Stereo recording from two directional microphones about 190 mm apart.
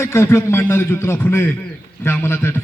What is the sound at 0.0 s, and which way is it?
A man's voice, 15° left (ahead or behind).